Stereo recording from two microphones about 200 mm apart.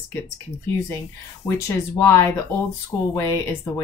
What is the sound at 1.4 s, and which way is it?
Speech, 15° left (ahead or behind).